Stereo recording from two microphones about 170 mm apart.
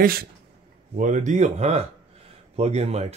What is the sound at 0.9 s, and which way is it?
Speech, 45° right (ahead or behind).